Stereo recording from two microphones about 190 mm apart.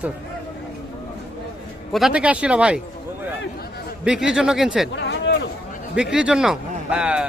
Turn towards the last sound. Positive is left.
turn(degrees=-5)  # may be behind; listen again after turning